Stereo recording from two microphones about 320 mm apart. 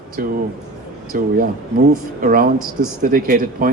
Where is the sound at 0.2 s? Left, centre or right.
Right.